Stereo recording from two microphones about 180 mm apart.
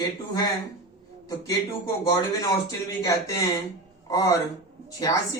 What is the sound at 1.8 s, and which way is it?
Speech, 20° left (ahead or behind).